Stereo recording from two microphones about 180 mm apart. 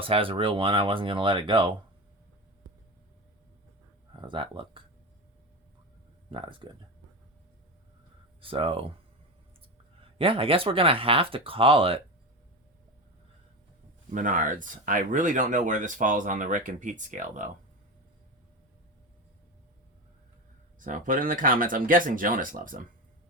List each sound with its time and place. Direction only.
0.0 s speech: 30° right (ahead or behind)
4.2 s speech: 25° right (ahead or behind)
8.4 s speech: 30° right (ahead or behind)
10.2 s speech: 30° right (ahead or behind)
14.1 s speech: 45° right (ahead or behind)
20.7 s speech: 50° right (ahead or behind)